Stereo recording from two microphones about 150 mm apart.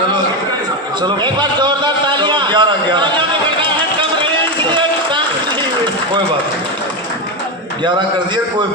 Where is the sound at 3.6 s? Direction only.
35° right (ahead or behind).